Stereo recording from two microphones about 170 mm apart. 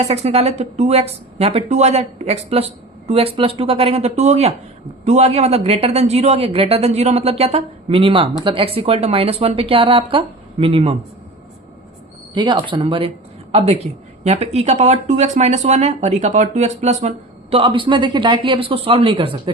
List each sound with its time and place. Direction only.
0.0 s speech: 40° right (ahead or behind)
12.3 s a woman's voice: 25° right (ahead or behind)